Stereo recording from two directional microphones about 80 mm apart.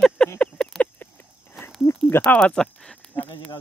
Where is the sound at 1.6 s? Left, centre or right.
Left.